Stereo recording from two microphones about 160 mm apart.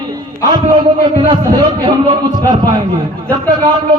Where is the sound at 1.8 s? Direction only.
30° right (ahead or behind).